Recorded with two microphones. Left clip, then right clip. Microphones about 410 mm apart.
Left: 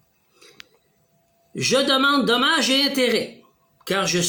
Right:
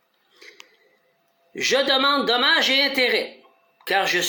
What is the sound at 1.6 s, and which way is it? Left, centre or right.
Speech, left.